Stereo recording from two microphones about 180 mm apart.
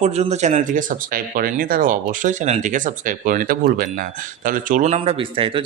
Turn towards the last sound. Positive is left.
turn(degrees=-30)  # may be behind; listen again after turning